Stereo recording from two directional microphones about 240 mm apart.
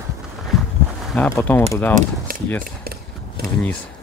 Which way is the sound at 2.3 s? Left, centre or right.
Right.